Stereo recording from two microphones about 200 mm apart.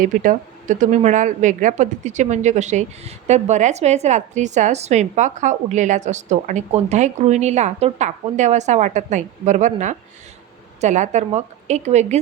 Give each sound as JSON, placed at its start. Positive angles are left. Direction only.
{"t": 0.0, "sound": "speech", "side_deg": -40}